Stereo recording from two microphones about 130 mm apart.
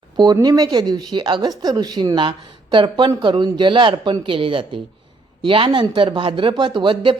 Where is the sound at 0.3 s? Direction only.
30° right (ahead or behind).